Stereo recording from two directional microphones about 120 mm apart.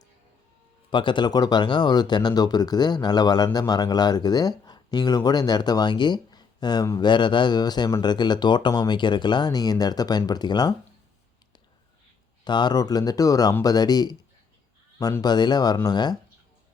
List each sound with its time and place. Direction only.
0.9 s speech: 40° left (ahead or behind)
12.5 s speech: 40° left (ahead or behind)